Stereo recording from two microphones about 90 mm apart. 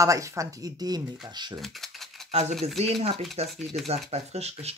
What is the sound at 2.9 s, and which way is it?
Speech, 90° right.